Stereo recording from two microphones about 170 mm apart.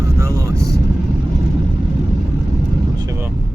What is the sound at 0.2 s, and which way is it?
Vehicle, 20° right (ahead or behind).